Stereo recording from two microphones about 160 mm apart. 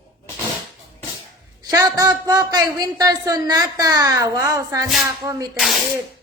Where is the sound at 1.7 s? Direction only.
20° right (ahead or behind).